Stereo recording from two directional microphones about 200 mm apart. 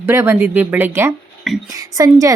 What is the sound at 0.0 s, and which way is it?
A woman's voice, 10° right (ahead or behind).